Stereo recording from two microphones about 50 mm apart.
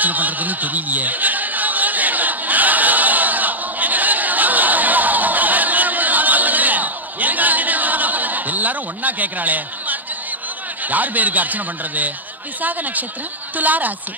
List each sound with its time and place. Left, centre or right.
0.0 s a sound: right
10.9 s a man's voice: right
13.6 s a man's voice: right